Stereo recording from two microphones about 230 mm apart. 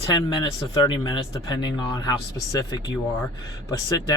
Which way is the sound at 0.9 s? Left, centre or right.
Centre.